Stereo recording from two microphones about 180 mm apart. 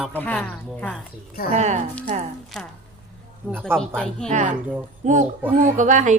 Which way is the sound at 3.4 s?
10° right (ahead or behind).